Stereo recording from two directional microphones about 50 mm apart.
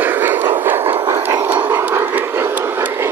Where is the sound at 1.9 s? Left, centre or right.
Right.